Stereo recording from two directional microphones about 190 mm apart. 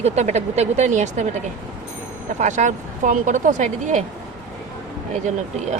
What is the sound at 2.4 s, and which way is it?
Speech, 40° right (ahead or behind).